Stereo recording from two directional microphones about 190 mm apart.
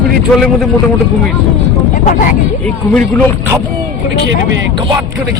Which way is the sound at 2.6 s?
5° left (ahead or behind).